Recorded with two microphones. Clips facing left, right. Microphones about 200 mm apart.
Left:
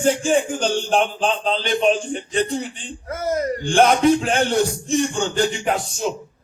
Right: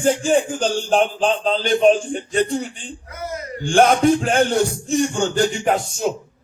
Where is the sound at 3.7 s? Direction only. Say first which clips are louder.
Right 1 dB; 45° right (ahead or behind).